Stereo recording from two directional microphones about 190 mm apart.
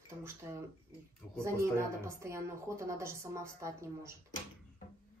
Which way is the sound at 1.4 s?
15° right (ahead or behind).